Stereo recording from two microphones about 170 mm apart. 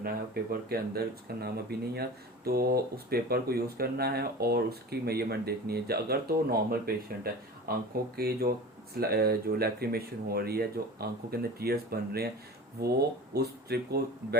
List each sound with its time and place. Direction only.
0.0 s speech: 60° right (ahead or behind)